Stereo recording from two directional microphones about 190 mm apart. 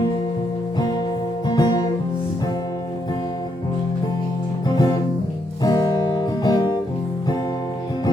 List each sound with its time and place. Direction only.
1.5 s music: 20° left (ahead or behind)
4.7 s music: 20° left (ahead or behind)